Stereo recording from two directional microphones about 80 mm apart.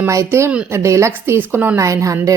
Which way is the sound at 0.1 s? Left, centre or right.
Right.